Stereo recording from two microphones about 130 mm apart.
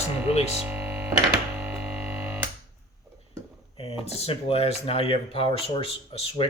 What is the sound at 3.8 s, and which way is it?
Speech, 50° left (ahead or behind).